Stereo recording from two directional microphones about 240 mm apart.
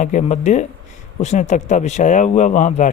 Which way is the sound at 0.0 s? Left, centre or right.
Left.